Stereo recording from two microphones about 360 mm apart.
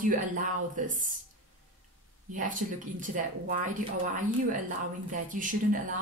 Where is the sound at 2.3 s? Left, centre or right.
Right.